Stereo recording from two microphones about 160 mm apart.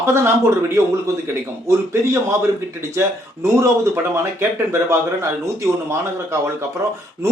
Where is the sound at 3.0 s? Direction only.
15° right (ahead or behind).